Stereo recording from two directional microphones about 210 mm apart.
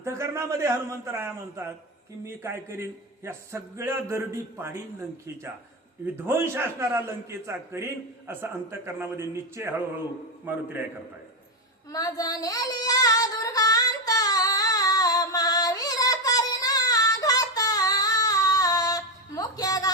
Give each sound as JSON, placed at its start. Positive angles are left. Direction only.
{"t": 0.0, "sound": "a man's voice", "side_deg": -15}
{"t": 11.9, "sound": "child singing", "side_deg": 15}